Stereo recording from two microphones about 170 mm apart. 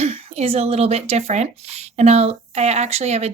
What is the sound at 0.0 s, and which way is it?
Speech, 35° right (ahead or behind).